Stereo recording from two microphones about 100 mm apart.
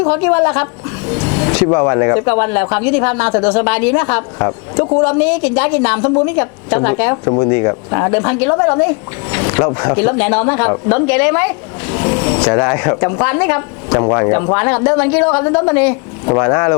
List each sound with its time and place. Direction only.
0.0 s speech: 25° left (ahead or behind)
5.1 s speech: 20° left (ahead or behind)